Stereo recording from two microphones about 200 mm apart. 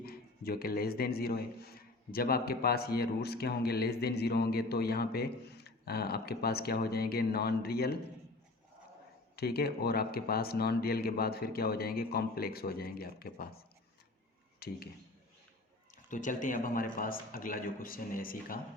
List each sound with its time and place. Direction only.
0.0 s a man's voice: 50° left (ahead or behind)
9.3 s a man's voice: 50° left (ahead or behind)
14.6 s speech: 50° left (ahead or behind)
16.0 s a man's voice: 40° left (ahead or behind)